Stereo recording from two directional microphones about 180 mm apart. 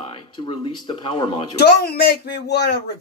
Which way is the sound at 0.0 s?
30° left (ahead or behind).